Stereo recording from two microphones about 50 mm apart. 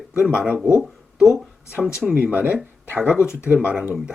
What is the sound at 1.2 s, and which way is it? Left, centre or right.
Speech, centre.